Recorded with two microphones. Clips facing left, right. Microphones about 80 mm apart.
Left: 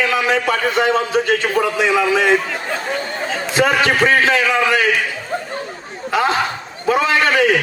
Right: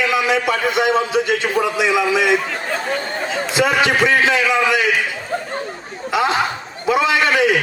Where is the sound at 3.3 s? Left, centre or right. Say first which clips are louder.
Left 1 dB; left.